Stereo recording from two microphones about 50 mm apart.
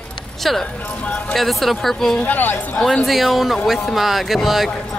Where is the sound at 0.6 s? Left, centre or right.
Left.